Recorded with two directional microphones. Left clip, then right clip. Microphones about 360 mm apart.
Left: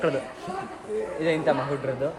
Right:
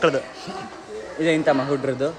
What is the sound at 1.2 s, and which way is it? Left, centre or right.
Speech, right.